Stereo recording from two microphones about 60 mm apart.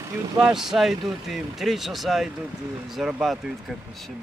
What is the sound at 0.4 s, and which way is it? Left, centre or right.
Speech, centre.